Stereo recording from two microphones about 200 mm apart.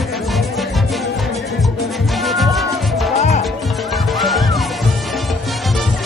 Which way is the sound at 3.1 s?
35° left (ahead or behind).